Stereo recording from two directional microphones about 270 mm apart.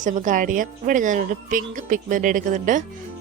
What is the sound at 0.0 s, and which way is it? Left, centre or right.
A woman's voice, right.